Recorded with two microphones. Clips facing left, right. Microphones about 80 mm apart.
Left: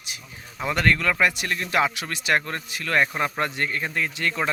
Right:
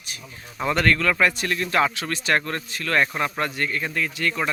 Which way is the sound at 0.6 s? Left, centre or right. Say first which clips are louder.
Right 1 dB; centre.